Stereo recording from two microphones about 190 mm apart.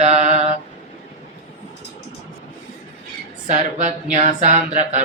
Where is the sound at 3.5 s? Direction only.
40° right (ahead or behind).